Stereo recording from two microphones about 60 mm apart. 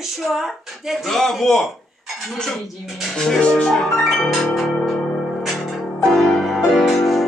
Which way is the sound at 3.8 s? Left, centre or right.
Centre.